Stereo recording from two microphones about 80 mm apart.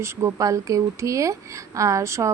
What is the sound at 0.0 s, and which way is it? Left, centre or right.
Speech, right.